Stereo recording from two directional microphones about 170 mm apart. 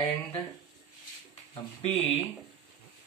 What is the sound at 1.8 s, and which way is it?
Speech, 40° left (ahead or behind).